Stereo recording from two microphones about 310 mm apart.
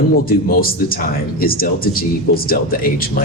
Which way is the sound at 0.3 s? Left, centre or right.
Left.